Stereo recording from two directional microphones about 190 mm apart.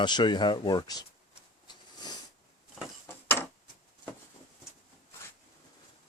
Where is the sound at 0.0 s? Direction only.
25° left (ahead or behind).